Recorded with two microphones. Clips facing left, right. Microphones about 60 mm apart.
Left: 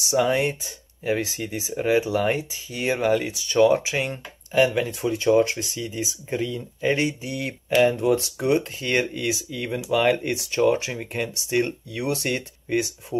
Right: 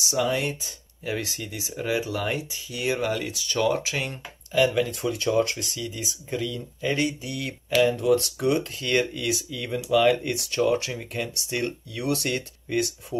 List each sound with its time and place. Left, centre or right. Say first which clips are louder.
0.1 s speech: left 4 dB; left